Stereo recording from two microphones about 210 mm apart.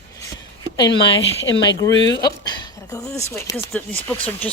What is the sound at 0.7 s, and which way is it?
Speech, 20° left (ahead or behind).